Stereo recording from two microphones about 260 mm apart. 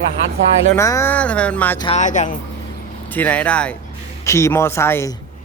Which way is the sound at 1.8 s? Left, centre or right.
Left.